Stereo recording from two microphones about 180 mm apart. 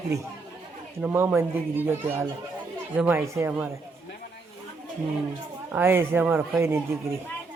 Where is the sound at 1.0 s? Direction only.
10° right (ahead or behind).